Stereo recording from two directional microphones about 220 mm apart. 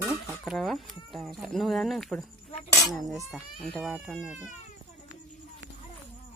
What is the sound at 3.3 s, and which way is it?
Speech, centre (ahead or behind).